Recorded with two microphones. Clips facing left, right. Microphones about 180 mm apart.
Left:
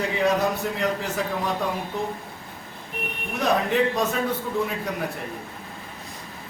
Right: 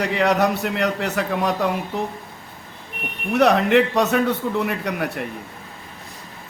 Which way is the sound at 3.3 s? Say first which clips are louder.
Right 6 dB; 70° right (ahead or behind).